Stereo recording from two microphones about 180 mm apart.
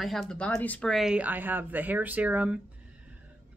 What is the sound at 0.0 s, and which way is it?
Speech, centre (ahead or behind).